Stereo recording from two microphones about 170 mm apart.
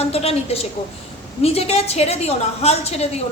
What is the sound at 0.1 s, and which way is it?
A woman's voice, 35° left (ahead or behind).